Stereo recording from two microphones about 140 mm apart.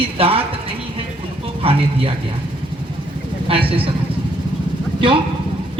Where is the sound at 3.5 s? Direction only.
40° right (ahead or behind).